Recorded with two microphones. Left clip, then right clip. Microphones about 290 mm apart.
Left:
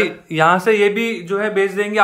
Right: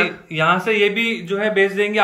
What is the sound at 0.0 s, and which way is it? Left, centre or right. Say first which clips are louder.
Speech: left 3 dB; centre.